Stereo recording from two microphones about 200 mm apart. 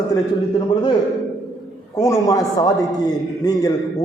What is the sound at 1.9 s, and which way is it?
A man's voice, 15° left (ahead or behind).